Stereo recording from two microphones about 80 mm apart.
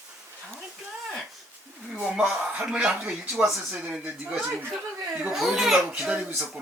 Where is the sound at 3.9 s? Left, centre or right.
Centre.